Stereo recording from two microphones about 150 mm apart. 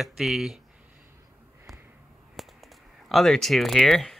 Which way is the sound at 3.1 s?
Centre (ahead or behind).